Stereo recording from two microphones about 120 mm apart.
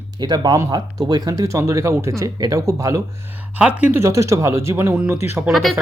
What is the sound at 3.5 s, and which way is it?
Speech, 10° right (ahead or behind).